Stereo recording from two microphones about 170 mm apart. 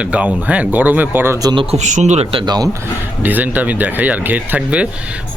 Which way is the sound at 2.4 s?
25° right (ahead or behind).